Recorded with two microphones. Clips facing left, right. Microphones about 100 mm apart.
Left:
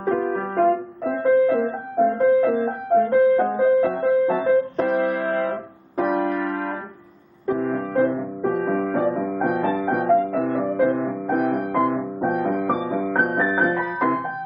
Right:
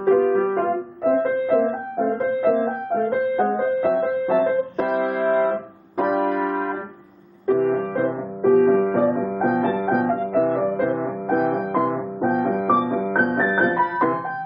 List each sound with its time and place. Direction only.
0.3 s music: centre (ahead or behind)